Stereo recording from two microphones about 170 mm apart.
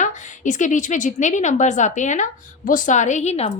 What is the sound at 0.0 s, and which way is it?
A woman's voice, 45° left (ahead or behind).